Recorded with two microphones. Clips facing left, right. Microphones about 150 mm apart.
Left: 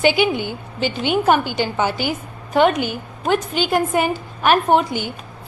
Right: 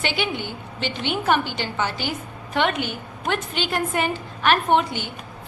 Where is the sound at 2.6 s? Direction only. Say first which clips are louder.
Left 7 dB; 40° left (ahead or behind).